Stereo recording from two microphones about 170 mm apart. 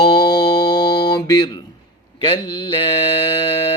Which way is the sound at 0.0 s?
25° left (ahead or behind).